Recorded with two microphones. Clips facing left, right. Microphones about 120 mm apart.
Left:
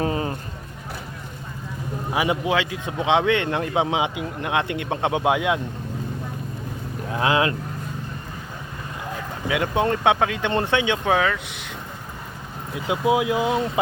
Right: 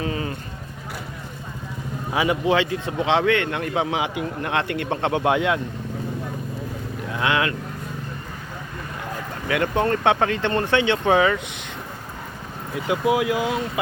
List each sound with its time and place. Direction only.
0.0 s a sound: 30° left (ahead or behind)
2.1 s speech: 20° left (ahead or behind)
2.5 s speech: 5° left (ahead or behind)
7.1 s speech: 30° left (ahead or behind)
9.5 s speech: 15° left (ahead or behind)
10.5 s speech: 20° left (ahead or behind)
11.0 s speech: centre (ahead or behind)
12.9 s speech: 20° left (ahead or behind)